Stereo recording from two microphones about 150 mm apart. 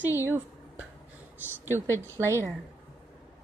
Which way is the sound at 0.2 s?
15° right (ahead or behind).